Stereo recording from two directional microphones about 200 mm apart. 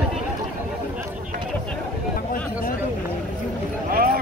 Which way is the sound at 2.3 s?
45° left (ahead or behind).